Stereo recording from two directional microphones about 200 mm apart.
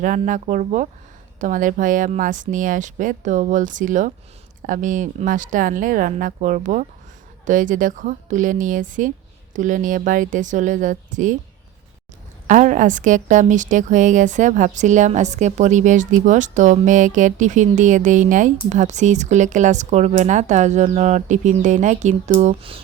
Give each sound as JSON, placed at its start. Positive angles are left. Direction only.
{"t": 0.0, "sound": "a woman's voice", "side_deg": -40}
{"t": 12.5, "sound": "a woman's voice", "side_deg": -40}